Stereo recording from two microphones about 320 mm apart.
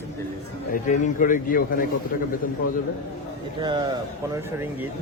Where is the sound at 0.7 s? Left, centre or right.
Left.